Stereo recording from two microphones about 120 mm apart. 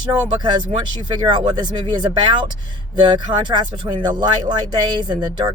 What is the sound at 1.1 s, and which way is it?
Speech, 40° right (ahead or behind).